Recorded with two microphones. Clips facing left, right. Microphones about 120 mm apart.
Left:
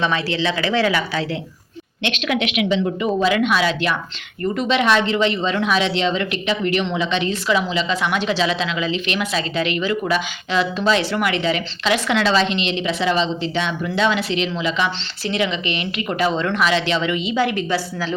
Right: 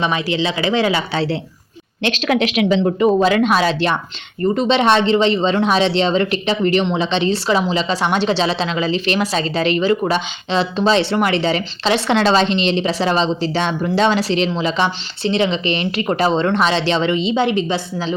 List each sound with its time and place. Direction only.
0.0 s speech: 15° right (ahead or behind)
2.0 s a woman's voice: 35° right (ahead or behind)